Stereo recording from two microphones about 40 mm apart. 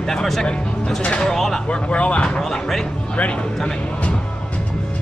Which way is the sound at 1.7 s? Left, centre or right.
Left.